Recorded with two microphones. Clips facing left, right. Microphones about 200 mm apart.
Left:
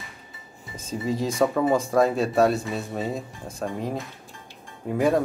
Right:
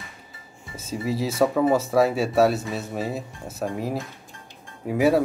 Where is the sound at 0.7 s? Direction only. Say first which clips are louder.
Even; 5° right (ahead or behind).